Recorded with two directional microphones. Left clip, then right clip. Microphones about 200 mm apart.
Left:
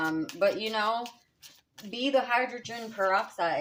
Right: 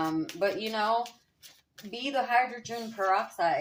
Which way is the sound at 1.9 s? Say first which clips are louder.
Left 1 dB; 40° left (ahead or behind).